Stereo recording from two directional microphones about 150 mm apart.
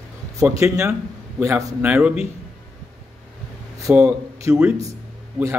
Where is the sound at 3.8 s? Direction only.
20° right (ahead or behind).